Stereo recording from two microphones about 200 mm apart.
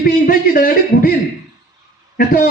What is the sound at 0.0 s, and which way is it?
A man's voice, 45° left (ahead or behind).